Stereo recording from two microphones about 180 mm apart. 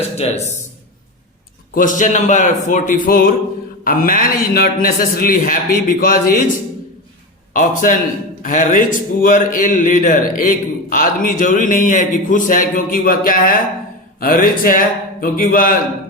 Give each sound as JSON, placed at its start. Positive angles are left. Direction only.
{"t": 0.2, "sound": "a man's voice", "side_deg": 40}
{"t": 1.7, "sound": "speech", "side_deg": 45}
{"t": 7.5, "sound": "speech", "side_deg": 50}